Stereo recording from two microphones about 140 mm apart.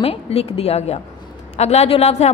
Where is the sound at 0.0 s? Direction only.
45° left (ahead or behind).